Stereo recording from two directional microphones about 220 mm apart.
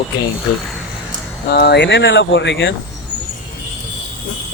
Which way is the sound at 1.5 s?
50° left (ahead or behind).